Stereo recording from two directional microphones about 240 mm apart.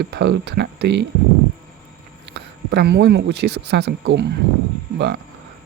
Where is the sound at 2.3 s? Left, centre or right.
Right.